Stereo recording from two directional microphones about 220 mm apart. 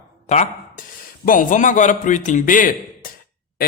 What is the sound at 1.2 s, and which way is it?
A man's voice, 35° left (ahead or behind).